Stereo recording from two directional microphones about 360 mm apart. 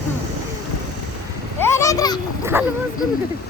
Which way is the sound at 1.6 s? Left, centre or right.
Centre.